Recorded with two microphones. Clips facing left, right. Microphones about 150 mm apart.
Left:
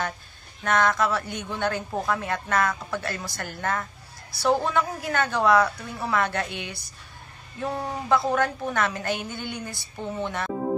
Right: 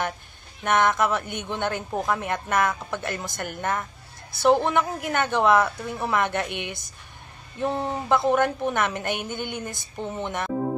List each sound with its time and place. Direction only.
0.7 s a man's voice: 20° right (ahead or behind)